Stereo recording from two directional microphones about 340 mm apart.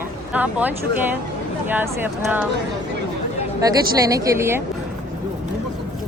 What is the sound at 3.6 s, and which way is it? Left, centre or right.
Speech, centre.